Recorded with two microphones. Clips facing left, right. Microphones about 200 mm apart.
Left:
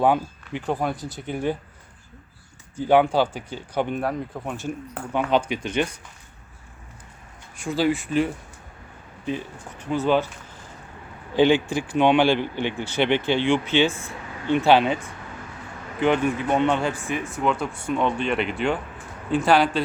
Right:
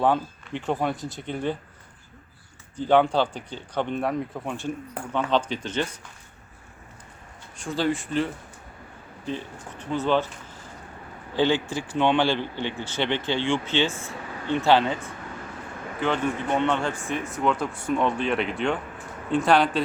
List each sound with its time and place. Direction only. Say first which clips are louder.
0.0 s speech: left 2 dB; 10° left (ahead or behind)
2.7 s speech: left 2 dB; 10° left (ahead or behind)
7.5 s speech: left 3 dB; 10° left (ahead or behind)
9.9 s speech: left 2 dB; 10° left (ahead or behind)
11.3 s speech: left 5 dB; 15° left (ahead or behind)
16.0 s speech: left 5 dB; 15° left (ahead or behind)
17.1 s speech: right 2 dB; centre (ahead or behind)